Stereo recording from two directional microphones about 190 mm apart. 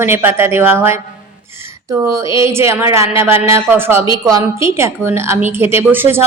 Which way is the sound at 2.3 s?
15° right (ahead or behind).